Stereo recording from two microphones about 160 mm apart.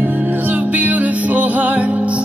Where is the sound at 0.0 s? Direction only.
10° right (ahead or behind).